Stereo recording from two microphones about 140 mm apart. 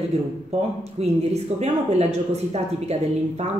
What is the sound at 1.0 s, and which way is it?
A woman's voice, 50° right (ahead or behind).